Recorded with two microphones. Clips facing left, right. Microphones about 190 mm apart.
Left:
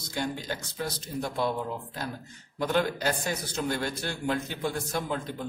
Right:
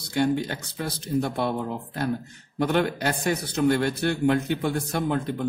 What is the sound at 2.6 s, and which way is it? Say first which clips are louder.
Speech: right 3 dB; 60° right (ahead or behind).